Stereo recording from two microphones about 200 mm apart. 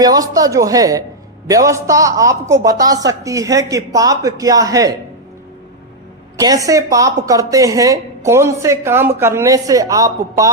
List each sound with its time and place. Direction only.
0.0 s a woman's voice: 20° right (ahead or behind)
6.3 s a woman's voice: 15° right (ahead or behind)